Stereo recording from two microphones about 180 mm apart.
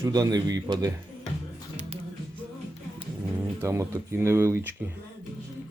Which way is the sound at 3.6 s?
15° right (ahead or behind).